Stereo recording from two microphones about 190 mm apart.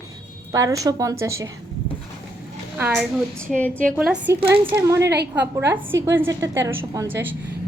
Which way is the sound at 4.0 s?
10° right (ahead or behind).